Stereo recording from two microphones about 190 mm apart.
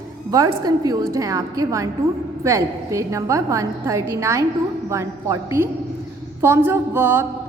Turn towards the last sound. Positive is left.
turn(degrees=-10)  # may be behind; listen again after turning